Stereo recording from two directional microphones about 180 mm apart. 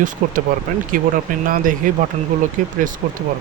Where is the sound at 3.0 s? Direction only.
45° right (ahead or behind).